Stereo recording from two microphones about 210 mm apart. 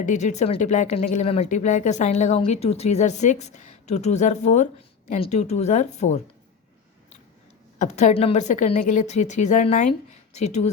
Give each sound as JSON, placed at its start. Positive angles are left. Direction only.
{"t": 0.0, "sound": "speech", "side_deg": 35}
{"t": 7.8, "sound": "speech", "side_deg": 35}